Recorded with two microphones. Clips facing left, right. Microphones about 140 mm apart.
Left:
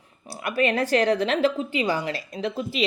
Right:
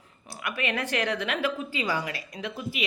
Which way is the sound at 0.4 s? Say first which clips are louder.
Left 7 dB; 35° left (ahead or behind).